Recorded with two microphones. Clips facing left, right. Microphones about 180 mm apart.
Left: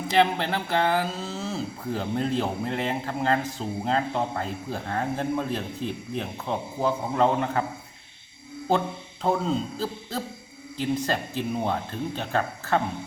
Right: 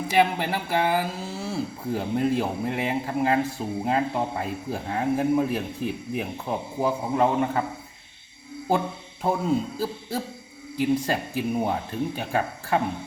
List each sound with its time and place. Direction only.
0.1 s speech: 10° right (ahead or behind)
9.2 s speech: 10° right (ahead or behind)